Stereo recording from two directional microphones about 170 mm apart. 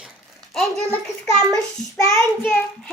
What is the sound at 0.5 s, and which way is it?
A child's voice, 5° left (ahead or behind).